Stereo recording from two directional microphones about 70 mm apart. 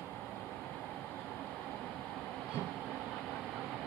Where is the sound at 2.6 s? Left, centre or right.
Left.